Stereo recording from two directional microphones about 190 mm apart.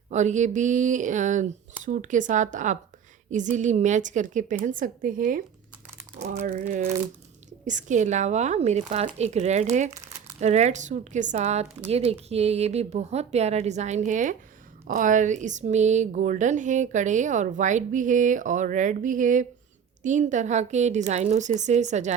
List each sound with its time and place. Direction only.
0.1 s speech: 40° right (ahead or behind)
6.4 s speech: 45° right (ahead or behind)